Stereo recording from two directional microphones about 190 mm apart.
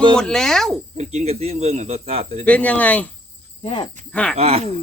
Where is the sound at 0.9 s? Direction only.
35° right (ahead or behind).